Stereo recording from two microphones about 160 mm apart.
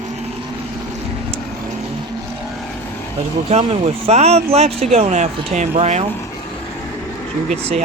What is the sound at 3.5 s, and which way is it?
Speech, 35° right (ahead or behind).